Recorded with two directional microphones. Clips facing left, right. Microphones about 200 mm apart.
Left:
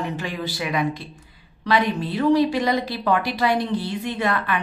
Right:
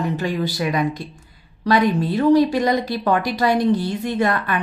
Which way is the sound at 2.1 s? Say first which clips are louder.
Right 2 dB; 45° right (ahead or behind).